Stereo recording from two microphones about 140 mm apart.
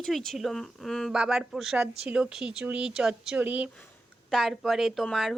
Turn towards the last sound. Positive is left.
turn(degrees=0)  # may be behind; listen again after turning